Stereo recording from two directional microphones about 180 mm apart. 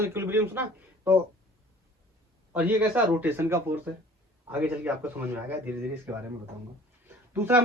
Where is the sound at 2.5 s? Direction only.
10° right (ahead or behind).